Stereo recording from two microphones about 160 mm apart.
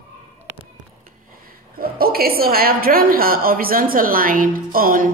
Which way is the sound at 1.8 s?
70° right (ahead or behind).